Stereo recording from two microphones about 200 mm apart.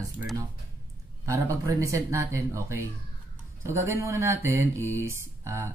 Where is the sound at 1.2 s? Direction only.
15° right (ahead or behind).